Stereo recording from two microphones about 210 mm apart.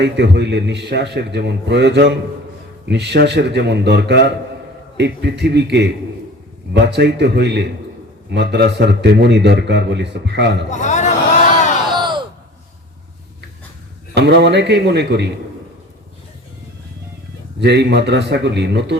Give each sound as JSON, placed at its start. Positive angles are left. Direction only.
{"t": 0.0, "sound": "a man's voice", "side_deg": -55}
{"t": 10.7, "sound": "a man's voice", "side_deg": 35}
{"t": 11.9, "sound": "a sound", "side_deg": -20}
{"t": 14.2, "sound": "a man's voice", "side_deg": -55}
{"t": 17.6, "sound": "a man's voice", "side_deg": -55}